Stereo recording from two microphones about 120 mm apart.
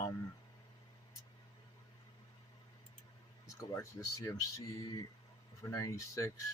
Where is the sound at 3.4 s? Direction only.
25° left (ahead or behind).